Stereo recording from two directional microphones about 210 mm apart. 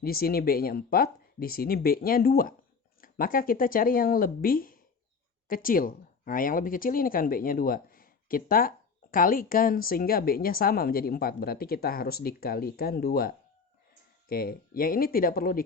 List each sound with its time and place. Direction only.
0.0 s speech: 45° left (ahead or behind)